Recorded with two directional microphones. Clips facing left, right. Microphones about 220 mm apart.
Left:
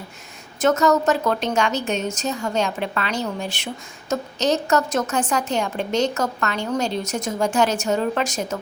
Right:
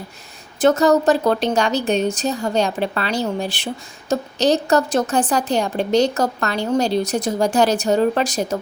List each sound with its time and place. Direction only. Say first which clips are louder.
0.6 s a woman's voice: right 3 dB; 35° right (ahead or behind)